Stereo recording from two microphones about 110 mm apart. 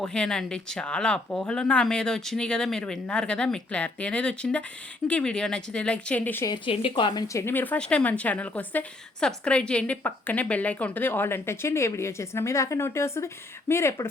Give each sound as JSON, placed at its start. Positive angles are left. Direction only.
{"t": 0.0, "sound": "speech", "side_deg": 5}
{"t": 6.7, "sound": "speech", "side_deg": 50}
{"t": 7.3, "sound": "a woman's voice", "side_deg": 20}